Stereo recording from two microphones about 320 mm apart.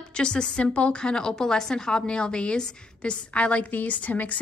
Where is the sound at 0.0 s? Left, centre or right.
Centre.